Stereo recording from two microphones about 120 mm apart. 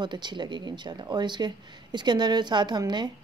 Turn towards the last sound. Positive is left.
turn(degrees=-35)  # may be behind; listen again after turning